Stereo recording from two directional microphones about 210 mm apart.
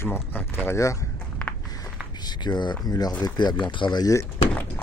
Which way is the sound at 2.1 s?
20° left (ahead or behind).